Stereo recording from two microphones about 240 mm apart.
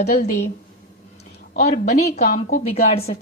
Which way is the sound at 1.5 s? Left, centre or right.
Left.